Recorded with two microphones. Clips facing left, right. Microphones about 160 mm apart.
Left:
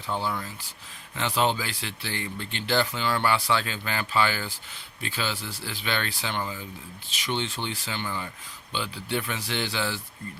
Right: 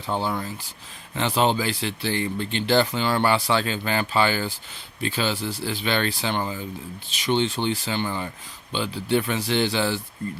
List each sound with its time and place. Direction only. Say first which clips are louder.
0.1 s speech: right 4 dB; 30° right (ahead or behind)